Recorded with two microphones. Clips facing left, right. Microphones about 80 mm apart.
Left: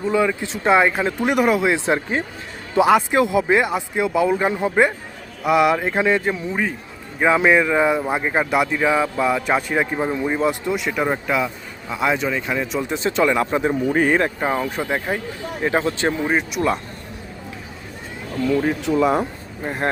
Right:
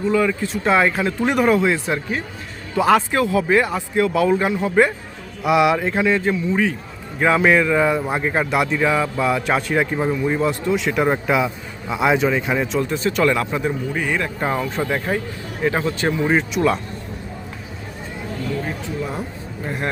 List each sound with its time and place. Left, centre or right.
0.1 s speech: centre
1.7 s speech: left; by 4.4 s centre
4.4 s speech: left
5.4 s speech: centre
6.0 s a man's voice: centre
10.1 s a man's voice: centre
12.6 s speech: centre
12.9 s speech: left
13.8 s speech: left
14.3 s speech: centre; by 16.1 s left
16.2 s a man's voice: centre
18.6 s speech: left
19.6 s speech: left